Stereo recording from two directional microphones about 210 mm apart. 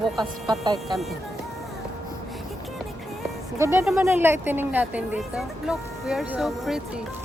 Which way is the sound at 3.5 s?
15° right (ahead or behind).